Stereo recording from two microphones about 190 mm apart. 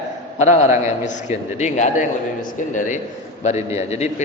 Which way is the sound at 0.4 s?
40° left (ahead or behind).